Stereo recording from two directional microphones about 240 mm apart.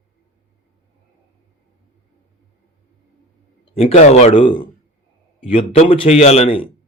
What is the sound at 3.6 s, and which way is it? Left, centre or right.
A man's voice, left.